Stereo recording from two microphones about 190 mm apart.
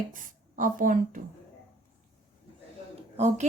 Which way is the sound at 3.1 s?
35° right (ahead or behind).